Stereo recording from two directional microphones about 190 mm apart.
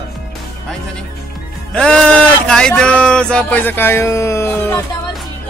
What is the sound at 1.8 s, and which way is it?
Speech, 5° left (ahead or behind).